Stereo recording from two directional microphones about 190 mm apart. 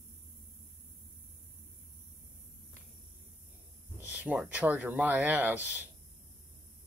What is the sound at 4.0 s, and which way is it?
Speech, 5° right (ahead or behind).